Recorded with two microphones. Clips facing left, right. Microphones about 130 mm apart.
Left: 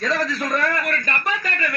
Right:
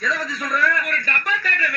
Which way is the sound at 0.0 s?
70° left (ahead or behind).